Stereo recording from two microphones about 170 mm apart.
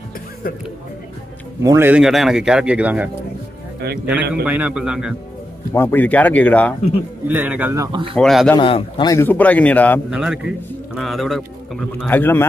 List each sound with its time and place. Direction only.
1.6 s a man's voice: 15° right (ahead or behind)
5.7 s speech: 15° left (ahead or behind)
7.2 s a man's voice: 10° right (ahead or behind)
7.8 s speech: 30° right (ahead or behind)
8.2 s speech: centre (ahead or behind)
8.5 s a man's voice: 30° left (ahead or behind)
9.1 s speech: 10° left (ahead or behind)
10.1 s speech: 5° right (ahead or behind)
12.1 s speech: 10° left (ahead or behind)